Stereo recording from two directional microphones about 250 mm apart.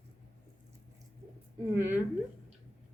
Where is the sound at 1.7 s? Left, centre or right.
Centre.